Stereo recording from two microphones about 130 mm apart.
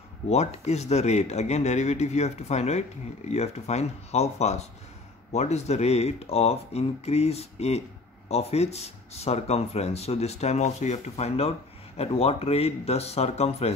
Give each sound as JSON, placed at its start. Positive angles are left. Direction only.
{"t": 0.3, "sound": "speech", "side_deg": 55}